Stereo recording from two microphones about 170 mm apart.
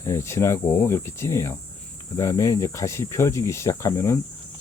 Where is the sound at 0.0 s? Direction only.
15° left (ahead or behind).